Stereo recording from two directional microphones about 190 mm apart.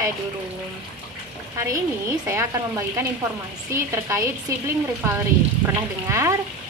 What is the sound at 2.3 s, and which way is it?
A woman's voice, 15° right (ahead or behind).